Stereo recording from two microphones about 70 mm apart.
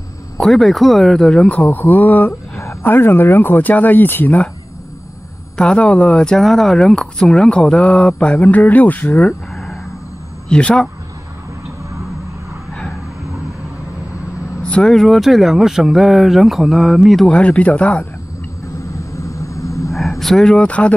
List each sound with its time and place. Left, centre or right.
0.4 s speech: centre
1.7 s speech: left
5.6 s speech: centre
10.5 s speech: centre
14.6 s speech: centre
17.3 s speech: centre
18.9 s vehicle: left
20.0 s speech: centre